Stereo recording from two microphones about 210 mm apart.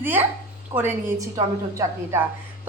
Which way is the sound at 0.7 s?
25° right (ahead or behind).